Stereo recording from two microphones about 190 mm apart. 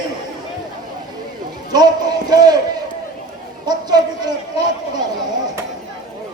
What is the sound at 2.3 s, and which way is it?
Speech, 20° right (ahead or behind).